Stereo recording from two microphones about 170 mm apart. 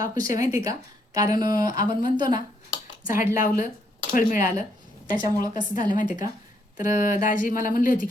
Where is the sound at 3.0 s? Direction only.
50° left (ahead or behind).